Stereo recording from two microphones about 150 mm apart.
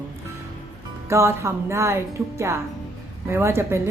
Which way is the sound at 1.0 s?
20° right (ahead or behind).